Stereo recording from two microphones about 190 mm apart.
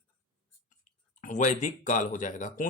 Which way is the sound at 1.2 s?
40° left (ahead or behind).